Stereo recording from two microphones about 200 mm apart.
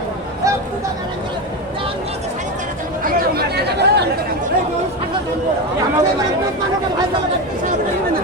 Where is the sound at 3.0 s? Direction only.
55° right (ahead or behind).